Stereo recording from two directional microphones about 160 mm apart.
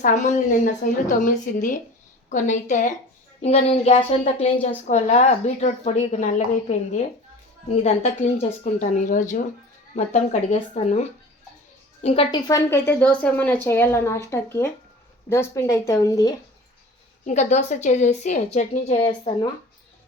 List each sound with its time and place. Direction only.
0.0 s speech: 50° left (ahead or behind)
3.4 s speech: 40° left (ahead or behind)
12.0 s speech: 35° left (ahead or behind)
12.5 s a woman's voice: 20° left (ahead or behind)
17.2 s speech: 45° left (ahead or behind)